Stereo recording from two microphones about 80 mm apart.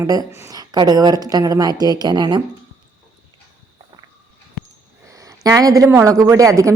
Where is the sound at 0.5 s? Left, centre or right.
Right.